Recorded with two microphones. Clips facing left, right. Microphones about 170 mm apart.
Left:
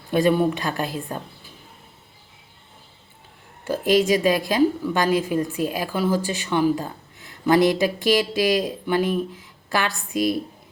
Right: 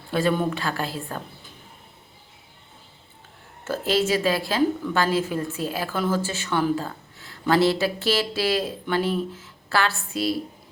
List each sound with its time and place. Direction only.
0.1 s a woman's voice: 15° left (ahead or behind)
3.6 s a woman's voice: 15° left (ahead or behind)